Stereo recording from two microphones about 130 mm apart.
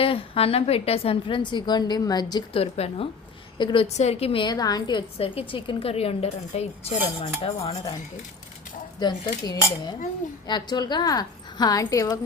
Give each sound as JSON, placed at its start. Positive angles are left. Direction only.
{"t": 0.0, "sound": "speech", "side_deg": 50}
{"t": 2.6, "sound": "speech", "side_deg": 50}
{"t": 3.6, "sound": "a woman's voice", "side_deg": 35}
{"t": 3.8, "sound": "speech", "side_deg": 55}
{"t": 5.2, "sound": "speech", "side_deg": 45}
{"t": 9.0, "sound": "a woman's voice", "side_deg": 35}